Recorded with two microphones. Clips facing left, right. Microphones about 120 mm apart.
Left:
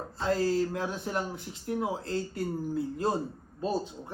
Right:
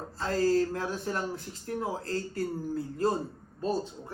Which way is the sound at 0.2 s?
20° left (ahead or behind).